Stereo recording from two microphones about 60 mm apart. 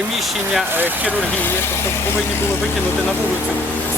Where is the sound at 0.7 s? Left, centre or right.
Right.